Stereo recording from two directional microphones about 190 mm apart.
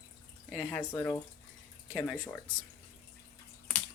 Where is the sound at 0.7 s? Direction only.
10° left (ahead or behind).